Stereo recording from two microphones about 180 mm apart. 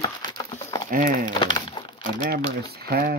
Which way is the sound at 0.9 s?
50° right (ahead or behind).